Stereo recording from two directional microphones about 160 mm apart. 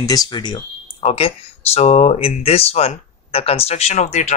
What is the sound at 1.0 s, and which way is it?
Speech, 40° left (ahead or behind).